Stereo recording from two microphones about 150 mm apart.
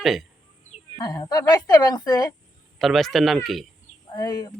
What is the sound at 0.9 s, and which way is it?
A man's voice, 25° left (ahead or behind).